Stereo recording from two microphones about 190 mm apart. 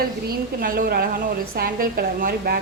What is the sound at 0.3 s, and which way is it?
A woman's voice, 45° right (ahead or behind).